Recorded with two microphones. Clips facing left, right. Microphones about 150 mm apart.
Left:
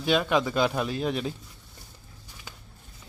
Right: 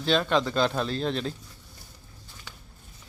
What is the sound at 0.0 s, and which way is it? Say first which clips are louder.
Speech: even; 10° left (ahead or behind).